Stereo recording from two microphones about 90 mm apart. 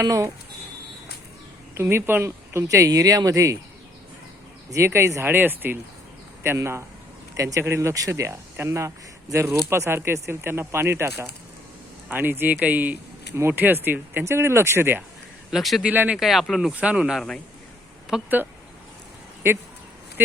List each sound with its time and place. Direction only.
0.0 s speech: 35° right (ahead or behind)
1.7 s speech: 30° right (ahead or behind)
4.7 s speech: 30° right (ahead or behind)
15.4 s speech: centre (ahead or behind)
15.8 s speech: 15° right (ahead or behind)
16.1 s speech: centre (ahead or behind)
17.2 s speech: 5° left (ahead or behind)
18.1 s speech: 5° right (ahead or behind)
19.4 s speech: 25° right (ahead or behind)